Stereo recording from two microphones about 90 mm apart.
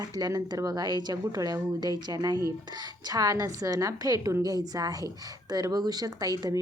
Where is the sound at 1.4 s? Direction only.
40° right (ahead or behind).